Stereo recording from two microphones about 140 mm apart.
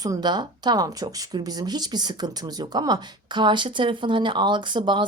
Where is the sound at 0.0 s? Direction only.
30° right (ahead or behind).